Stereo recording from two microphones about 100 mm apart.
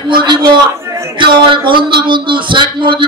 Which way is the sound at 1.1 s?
55° right (ahead or behind).